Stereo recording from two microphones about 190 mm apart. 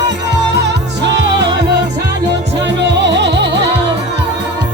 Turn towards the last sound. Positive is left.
turn(degrees=-65)  # may be behind; listen again after turning